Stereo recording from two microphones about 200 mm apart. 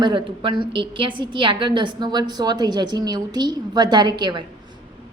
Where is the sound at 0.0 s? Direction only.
25° right (ahead or behind).